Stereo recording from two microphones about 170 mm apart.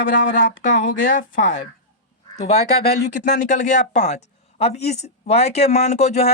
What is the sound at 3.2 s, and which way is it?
Speech, 45° left (ahead or behind).